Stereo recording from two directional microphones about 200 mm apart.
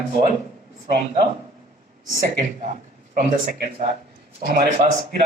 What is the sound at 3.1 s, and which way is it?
Speech, 40° right (ahead or behind).